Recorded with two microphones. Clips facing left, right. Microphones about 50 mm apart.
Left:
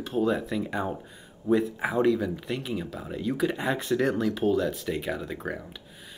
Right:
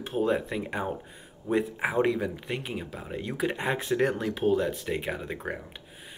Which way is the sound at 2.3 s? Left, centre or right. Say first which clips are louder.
Left 2 dB; centre.